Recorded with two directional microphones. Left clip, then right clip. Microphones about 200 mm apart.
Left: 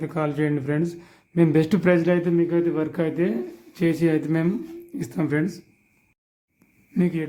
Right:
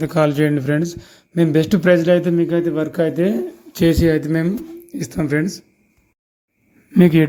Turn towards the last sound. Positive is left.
turn(degrees=-45)  # may be behind; listen again after turning